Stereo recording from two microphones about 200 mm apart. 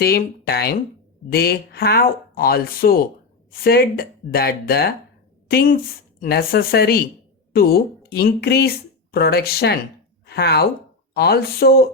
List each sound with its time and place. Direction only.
0.0 s a woman's voice: 50° left (ahead or behind)